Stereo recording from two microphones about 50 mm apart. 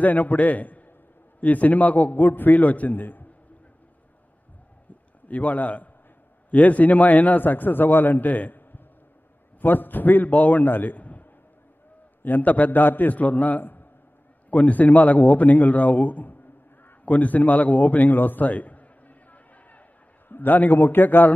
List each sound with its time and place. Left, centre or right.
0.0 s a man's voice: left
5.3 s a man's voice: left
17.0 s a sound: left
20.2 s a man's voice: left